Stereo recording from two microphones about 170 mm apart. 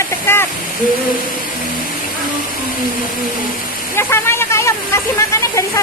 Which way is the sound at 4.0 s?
15° left (ahead or behind).